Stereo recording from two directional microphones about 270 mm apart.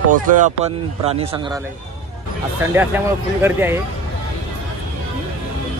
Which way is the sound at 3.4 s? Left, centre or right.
Centre.